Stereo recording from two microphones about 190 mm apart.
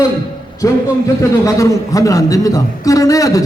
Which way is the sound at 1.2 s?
15° left (ahead or behind).